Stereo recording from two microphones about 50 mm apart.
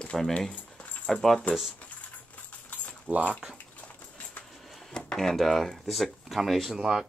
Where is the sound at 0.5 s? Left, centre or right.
Left.